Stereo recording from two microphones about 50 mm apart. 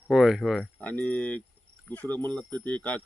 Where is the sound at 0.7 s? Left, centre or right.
Left.